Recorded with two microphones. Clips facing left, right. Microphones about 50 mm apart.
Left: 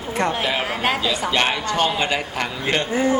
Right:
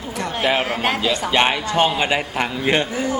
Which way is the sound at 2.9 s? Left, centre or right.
Left.